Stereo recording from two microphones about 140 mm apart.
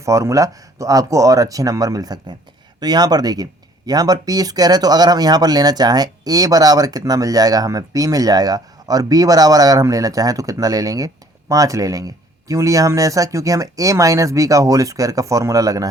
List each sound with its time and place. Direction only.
0.0 s speech: 20° right (ahead or behind)